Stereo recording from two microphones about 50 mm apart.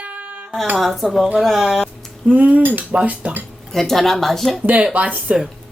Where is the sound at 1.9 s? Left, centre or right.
Centre.